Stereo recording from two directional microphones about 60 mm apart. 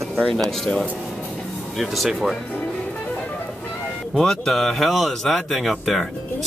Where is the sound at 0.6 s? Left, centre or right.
Centre.